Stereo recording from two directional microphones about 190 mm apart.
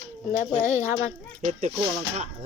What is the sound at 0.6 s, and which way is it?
Speech, 40° left (ahead or behind).